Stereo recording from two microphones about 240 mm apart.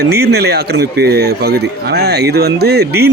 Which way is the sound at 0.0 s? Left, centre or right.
Right.